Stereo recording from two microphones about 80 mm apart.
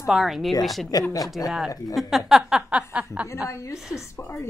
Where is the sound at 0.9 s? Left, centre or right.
Left.